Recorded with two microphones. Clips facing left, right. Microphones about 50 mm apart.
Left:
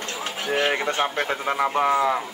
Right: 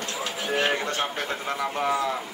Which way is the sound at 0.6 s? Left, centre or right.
Left.